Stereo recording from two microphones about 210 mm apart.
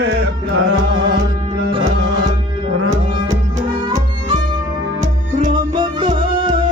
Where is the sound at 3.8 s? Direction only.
20° right (ahead or behind).